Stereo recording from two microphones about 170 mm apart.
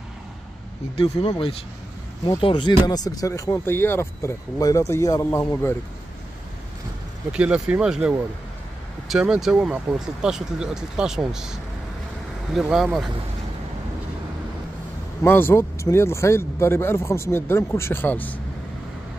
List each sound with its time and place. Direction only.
0.9 s speech: 30° left (ahead or behind); by 5.8 s 10° left (ahead or behind)
7.3 s speech: 5° right (ahead or behind)
9.1 s speech: 5° right (ahead or behind)
12.5 s speech: 5° right (ahead or behind)
15.2 s speech: 15° left (ahead or behind)